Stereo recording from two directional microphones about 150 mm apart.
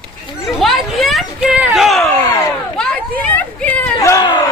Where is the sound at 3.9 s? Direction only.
25° left (ahead or behind).